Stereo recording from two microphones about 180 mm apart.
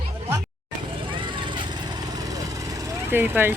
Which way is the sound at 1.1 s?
25° right (ahead or behind).